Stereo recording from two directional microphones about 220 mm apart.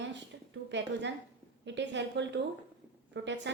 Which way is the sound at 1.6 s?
55° right (ahead or behind).